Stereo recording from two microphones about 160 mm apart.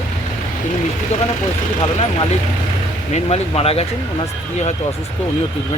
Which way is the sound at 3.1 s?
40° left (ahead or behind).